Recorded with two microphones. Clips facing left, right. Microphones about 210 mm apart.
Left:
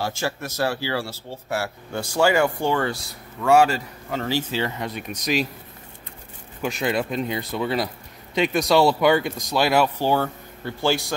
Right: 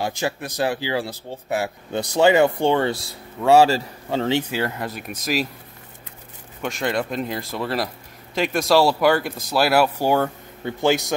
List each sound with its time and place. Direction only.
0.0 s speech: 15° right (ahead or behind)
4.4 s speech: 10° right (ahead or behind)
6.6 s speech: centre (ahead or behind); by 11.1 s 20° right (ahead or behind)